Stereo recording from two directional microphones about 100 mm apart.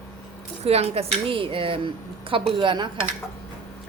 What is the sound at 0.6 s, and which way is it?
A woman's voice, 90° right.